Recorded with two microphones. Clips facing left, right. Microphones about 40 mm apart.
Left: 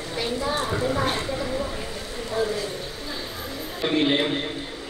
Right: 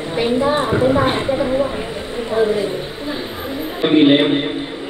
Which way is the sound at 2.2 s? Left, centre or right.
Right.